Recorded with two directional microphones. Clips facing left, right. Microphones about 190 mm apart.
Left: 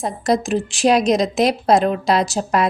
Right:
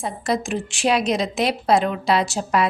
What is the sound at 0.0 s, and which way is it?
A woman's voice, 40° left (ahead or behind).